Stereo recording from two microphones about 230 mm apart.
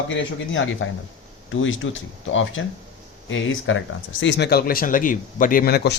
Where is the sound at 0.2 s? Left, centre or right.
Left.